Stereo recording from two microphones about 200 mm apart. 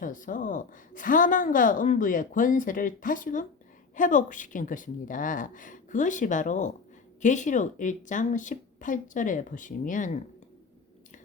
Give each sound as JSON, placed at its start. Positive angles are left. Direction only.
{"t": 0.0, "sound": "a woman's voice", "side_deg": 40}